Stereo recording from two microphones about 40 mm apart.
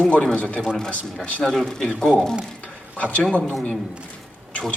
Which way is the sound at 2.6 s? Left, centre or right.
Left.